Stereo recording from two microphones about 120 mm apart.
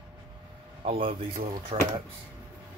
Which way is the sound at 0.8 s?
50° right (ahead or behind).